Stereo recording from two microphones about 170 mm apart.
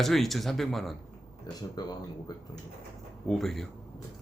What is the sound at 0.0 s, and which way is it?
Speech, centre (ahead or behind).